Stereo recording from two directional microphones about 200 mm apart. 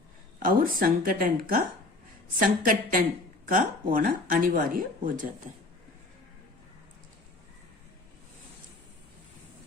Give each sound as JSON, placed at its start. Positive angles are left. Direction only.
{"t": 0.3, "sound": "speech", "side_deg": -45}